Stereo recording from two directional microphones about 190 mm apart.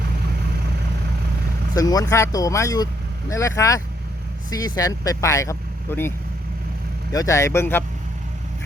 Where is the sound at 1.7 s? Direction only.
20° left (ahead or behind).